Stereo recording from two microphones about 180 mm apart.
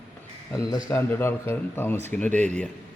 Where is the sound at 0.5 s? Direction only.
20° left (ahead or behind).